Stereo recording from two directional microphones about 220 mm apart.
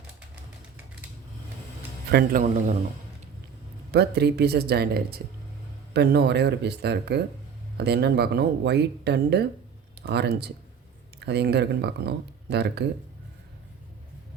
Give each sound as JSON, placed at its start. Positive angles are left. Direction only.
{"t": 2.0, "sound": "a man's voice", "side_deg": -45}
{"t": 3.9, "sound": "speech", "side_deg": -50}